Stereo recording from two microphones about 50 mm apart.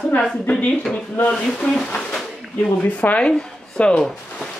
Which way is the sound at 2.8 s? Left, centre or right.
Left.